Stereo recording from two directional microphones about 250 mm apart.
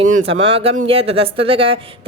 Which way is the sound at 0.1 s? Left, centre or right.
Right.